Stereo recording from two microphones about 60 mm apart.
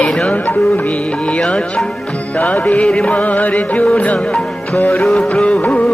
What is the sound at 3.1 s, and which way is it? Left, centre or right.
Music, left.